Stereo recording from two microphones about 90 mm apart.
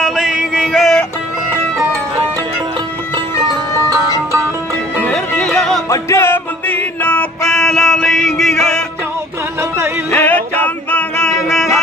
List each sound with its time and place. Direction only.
0.0 s music: 5° right (ahead or behind)
0.7 s music: centre (ahead or behind)
3.4 s music: 45° right (ahead or behind)
5.5 s a sound: 5° left (ahead or behind)
5.9 s music: 30° left (ahead or behind); by 8.8 s 5° left (ahead or behind)
9.6 s music: 30° right (ahead or behind)
10.1 s music: 15° left (ahead or behind)